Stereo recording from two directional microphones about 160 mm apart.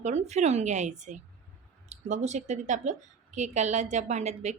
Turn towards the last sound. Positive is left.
turn(degrees=-45)  # may be behind; listen again after turning